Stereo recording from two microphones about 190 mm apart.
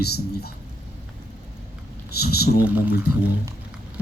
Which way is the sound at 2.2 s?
55° left (ahead or behind).